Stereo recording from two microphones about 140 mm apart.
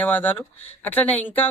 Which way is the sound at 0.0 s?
10° left (ahead or behind).